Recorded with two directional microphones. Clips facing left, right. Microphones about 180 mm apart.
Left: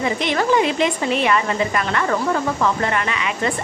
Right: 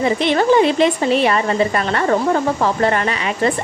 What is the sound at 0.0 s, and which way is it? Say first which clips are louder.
A woman's voice: right 5 dB; 30° right (ahead or behind).